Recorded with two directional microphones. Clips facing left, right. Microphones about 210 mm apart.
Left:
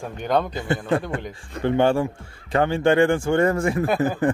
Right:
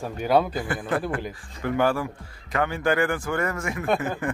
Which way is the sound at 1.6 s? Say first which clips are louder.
Left 4 dB; 25° left (ahead or behind).